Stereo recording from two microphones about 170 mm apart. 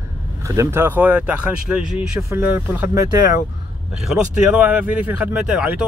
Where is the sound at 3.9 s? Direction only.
5° right (ahead or behind).